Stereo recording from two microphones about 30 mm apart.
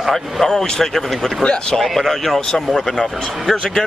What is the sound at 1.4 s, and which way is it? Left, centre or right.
Speech, left.